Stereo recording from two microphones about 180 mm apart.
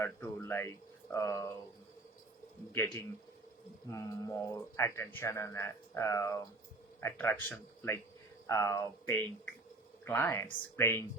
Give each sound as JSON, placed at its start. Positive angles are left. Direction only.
{"t": 0.0, "sound": "a man's voice", "side_deg": 15}
{"t": 3.8, "sound": "a man's voice", "side_deg": 15}